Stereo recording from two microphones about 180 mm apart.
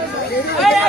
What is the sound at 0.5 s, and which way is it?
Chatter, centre (ahead or behind).